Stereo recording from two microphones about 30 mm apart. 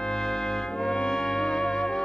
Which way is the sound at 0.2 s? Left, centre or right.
Centre.